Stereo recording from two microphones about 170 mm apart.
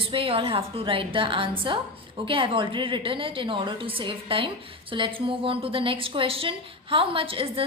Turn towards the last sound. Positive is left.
turn(degrees=-30)  # may be behind; listen again after turning